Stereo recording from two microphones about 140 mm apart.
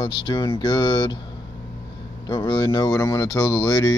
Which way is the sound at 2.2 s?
30° left (ahead or behind).